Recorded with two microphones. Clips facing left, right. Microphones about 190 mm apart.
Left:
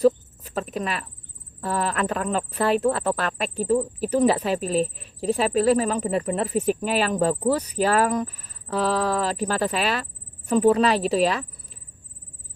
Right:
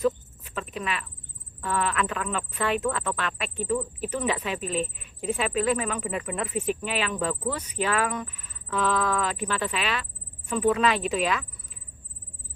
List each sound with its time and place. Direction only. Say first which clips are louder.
0.0 s cricket: left 6 dB; 40° left (ahead or behind)
1.6 s speech: left 2 dB; 40° left (ahead or behind)